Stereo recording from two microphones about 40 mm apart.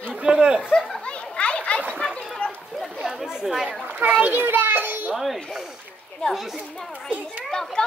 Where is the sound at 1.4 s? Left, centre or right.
Left.